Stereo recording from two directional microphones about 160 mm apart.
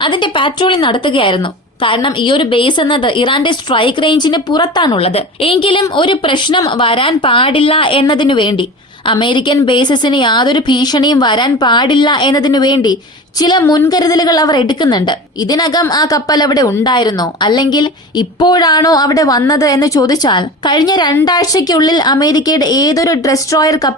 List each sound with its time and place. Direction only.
0.0 s a woman's voice: 30° left (ahead or behind)